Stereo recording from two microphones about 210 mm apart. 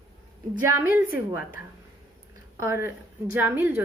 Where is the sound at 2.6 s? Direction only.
10° right (ahead or behind).